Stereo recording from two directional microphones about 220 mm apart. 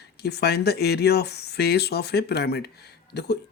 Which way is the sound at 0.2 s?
45° left (ahead or behind).